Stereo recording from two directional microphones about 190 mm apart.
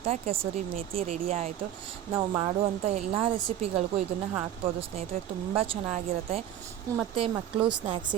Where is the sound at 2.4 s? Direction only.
35° right (ahead or behind).